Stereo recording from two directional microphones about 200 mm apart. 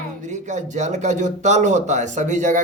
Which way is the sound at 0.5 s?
35° right (ahead or behind).